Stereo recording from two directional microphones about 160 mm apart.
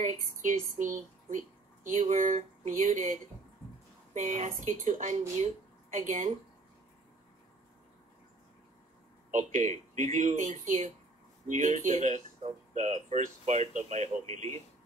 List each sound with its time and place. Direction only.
0.0 s speech: 50° right (ahead or behind)
9.3 s speech: 50° right (ahead or behind)